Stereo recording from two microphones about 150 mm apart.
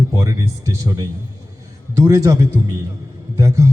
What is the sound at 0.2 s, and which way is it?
Speech, 20° right (ahead or behind).